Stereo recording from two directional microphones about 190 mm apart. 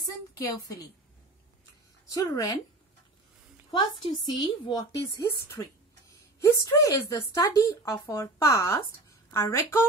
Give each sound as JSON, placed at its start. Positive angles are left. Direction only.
{"t": 0.3, "sound": "a woman's voice", "side_deg": 20}
{"t": 2.0, "sound": "speech", "side_deg": 20}
{"t": 3.7, "sound": "a woman's voice", "side_deg": 25}